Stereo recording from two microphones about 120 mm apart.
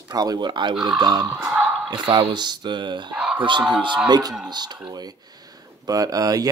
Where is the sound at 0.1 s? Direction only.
35° right (ahead or behind).